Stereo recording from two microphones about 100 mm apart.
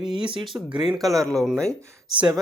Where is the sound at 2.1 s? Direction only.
55° right (ahead or behind).